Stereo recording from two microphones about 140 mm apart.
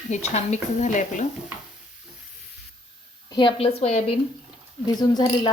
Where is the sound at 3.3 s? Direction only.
35° left (ahead or behind).